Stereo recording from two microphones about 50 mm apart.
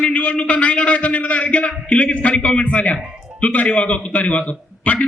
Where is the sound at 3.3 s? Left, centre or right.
Left.